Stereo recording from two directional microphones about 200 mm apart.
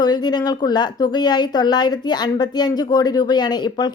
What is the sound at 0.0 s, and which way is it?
A woman's voice, 20° left (ahead or behind).